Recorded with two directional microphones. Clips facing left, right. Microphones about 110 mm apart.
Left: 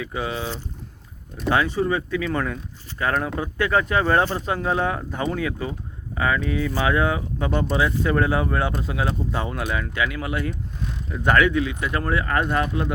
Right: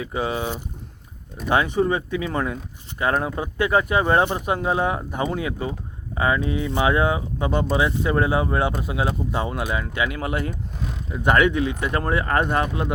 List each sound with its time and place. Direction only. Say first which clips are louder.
0.0 s speech: right 2 dB; 25° right (ahead or behind)
11.1 s speech: right 1 dB; 15° right (ahead or behind)
11.3 s speech: even; 25° right (ahead or behind)